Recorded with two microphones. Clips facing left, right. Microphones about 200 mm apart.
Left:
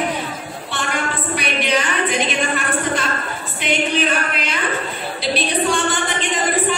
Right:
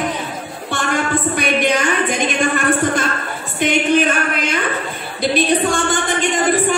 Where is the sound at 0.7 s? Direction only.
45° right (ahead or behind).